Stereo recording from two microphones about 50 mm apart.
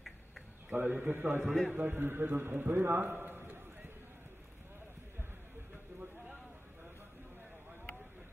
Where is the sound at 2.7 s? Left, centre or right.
Right.